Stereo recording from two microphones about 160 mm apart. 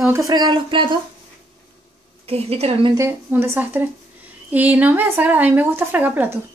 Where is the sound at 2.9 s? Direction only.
15° right (ahead or behind).